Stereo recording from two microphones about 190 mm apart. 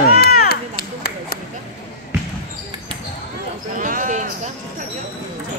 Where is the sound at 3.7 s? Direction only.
45° right (ahead or behind).